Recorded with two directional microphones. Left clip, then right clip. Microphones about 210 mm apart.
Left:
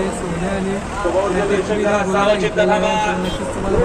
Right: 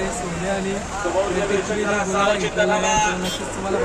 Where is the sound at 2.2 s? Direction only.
15° left (ahead or behind).